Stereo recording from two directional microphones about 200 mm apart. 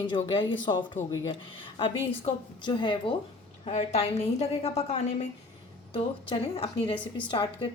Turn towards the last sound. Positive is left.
turn(degrees=25)  # may be behind; listen again after turning